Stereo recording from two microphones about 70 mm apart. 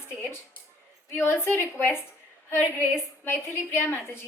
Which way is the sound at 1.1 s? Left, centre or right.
Left.